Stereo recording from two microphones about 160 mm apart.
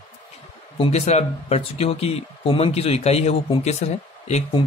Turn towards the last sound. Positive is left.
turn(degrees=45)  # may be behind; listen again after turning